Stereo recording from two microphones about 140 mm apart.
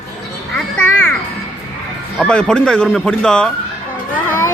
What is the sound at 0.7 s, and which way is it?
Music, 15° left (ahead or behind).